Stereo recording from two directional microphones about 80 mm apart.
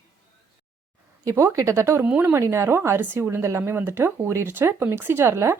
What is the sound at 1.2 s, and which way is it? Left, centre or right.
Speech, right.